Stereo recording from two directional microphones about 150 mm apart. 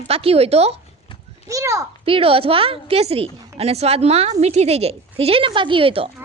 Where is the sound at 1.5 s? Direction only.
20° right (ahead or behind).